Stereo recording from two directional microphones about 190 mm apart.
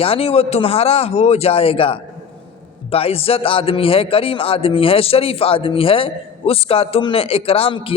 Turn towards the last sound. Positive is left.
turn(degrees=30)  # may be behind; listen again after turning